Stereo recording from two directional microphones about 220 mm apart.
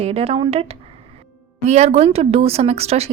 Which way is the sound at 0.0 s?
30° right (ahead or behind).